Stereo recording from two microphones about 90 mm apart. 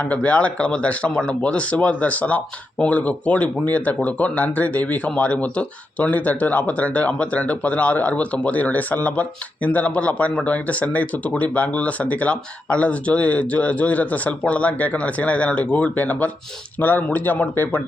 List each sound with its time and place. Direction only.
0.0 s speech: 15° left (ahead or behind)